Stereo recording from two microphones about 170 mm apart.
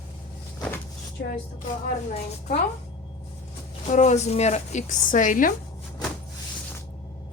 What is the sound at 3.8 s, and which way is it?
A woman's voice, 45° left (ahead or behind).